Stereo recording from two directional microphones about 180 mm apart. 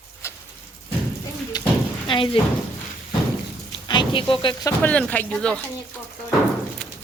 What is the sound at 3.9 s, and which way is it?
Speech, 25° left (ahead or behind).